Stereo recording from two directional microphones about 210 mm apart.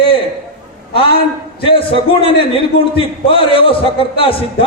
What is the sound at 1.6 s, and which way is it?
A man's voice, 25° left (ahead or behind).